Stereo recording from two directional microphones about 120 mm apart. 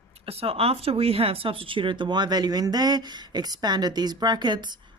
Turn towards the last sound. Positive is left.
turn(degrees=-40)  # may be behind; listen again after turning